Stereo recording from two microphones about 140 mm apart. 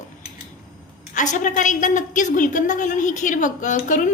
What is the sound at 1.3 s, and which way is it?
A woman's voice, 65° left (ahead or behind).